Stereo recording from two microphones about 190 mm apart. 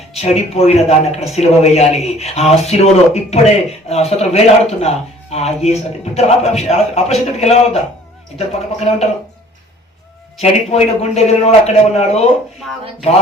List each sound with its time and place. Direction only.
0.1 s speech: 35° left (ahead or behind)
10.4 s speech: 35° left (ahead or behind)